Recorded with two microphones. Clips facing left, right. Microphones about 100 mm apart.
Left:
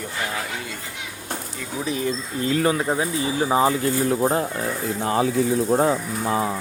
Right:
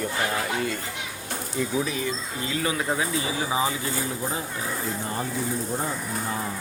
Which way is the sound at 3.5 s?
50° left (ahead or behind).